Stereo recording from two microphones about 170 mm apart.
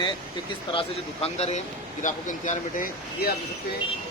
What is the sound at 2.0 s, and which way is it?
Speech, 50° left (ahead or behind).